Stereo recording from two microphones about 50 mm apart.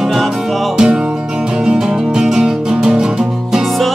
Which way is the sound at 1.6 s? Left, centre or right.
Centre.